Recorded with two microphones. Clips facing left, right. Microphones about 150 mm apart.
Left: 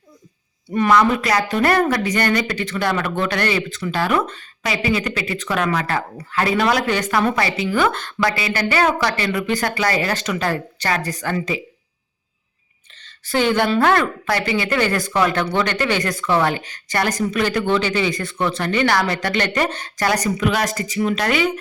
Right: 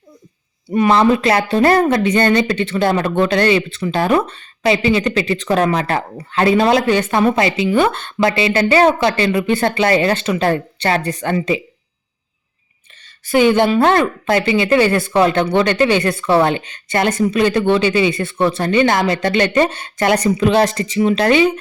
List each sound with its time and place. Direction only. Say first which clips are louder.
0.9 s speech: right 3 dB; 25° right (ahead or behind)
13.3 s speech: right 5 dB; 20° right (ahead or behind)